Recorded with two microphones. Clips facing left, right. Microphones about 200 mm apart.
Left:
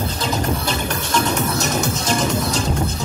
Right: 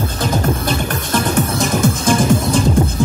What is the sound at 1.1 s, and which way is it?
Music, 50° right (ahead or behind).